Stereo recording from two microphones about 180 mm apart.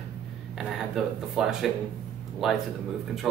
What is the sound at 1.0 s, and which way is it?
Speech, centre (ahead or behind).